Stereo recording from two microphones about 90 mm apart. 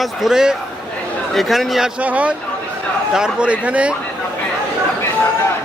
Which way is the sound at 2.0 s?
15° right (ahead or behind).